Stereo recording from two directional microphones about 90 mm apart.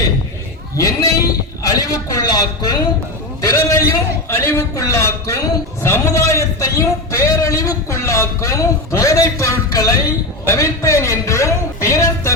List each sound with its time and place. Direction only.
0.8 s a man's voice: 35° left (ahead or behind)
3.4 s a man's voice: 35° left (ahead or behind)